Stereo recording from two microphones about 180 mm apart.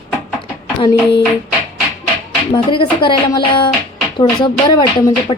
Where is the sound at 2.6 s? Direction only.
25° left (ahead or behind).